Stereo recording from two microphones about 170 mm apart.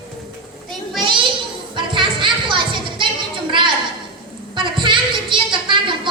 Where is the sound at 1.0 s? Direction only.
30° right (ahead or behind).